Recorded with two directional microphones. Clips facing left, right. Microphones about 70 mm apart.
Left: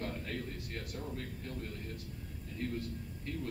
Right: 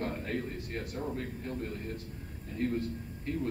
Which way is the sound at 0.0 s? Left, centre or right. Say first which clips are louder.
Right 5 dB; right.